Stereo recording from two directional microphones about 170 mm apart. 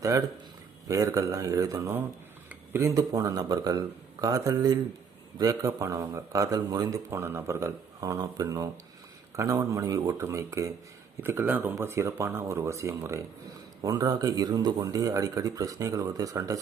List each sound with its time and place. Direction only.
0.9 s a man's voice: 20° right (ahead or behind)